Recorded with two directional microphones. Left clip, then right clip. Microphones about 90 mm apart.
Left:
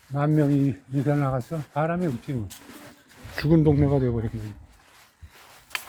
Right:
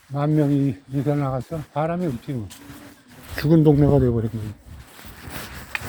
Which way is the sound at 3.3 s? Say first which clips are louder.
Right 3 dB; 45° right (ahead or behind).